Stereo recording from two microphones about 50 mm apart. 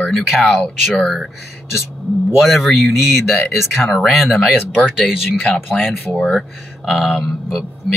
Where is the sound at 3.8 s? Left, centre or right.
Centre.